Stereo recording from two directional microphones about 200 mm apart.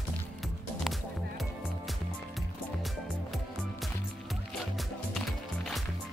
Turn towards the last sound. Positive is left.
turn(degrees=0)  # may be behind; listen again after turning